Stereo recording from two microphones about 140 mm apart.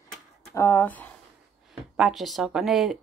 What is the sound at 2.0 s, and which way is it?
Speech, centre (ahead or behind).